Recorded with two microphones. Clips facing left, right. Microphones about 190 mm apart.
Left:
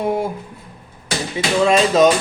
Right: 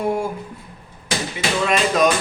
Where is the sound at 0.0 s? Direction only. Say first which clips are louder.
Left 2 dB; 25° left (ahead or behind).